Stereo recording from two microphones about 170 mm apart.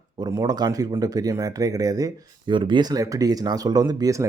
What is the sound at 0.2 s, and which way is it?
Speech, 20° right (ahead or behind).